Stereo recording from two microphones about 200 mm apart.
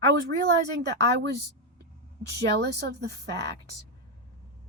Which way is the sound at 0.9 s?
60° right (ahead or behind).